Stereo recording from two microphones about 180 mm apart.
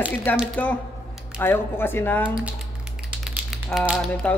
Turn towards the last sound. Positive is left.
turn(degrees=0)  # may be behind; listen again after turning